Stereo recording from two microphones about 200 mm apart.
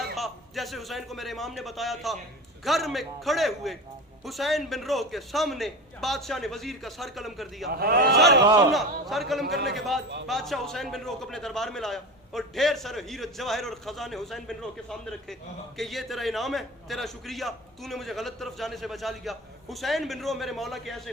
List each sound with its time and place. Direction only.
0.2 s a man's voice: centre (ahead or behind)
7.7 s a man's voice: 50° right (ahead or behind)
8.7 s a man's voice: centre (ahead or behind)